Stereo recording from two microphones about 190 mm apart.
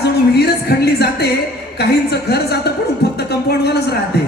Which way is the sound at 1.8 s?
60° left (ahead or behind).